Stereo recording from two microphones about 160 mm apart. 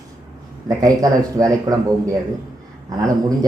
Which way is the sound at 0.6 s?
20° right (ahead or behind).